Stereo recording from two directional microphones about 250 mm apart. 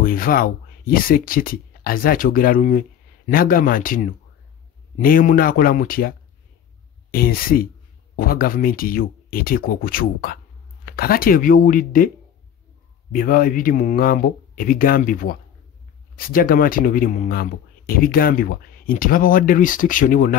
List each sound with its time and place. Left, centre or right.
0.0 s speech: left
13.1 s speech: left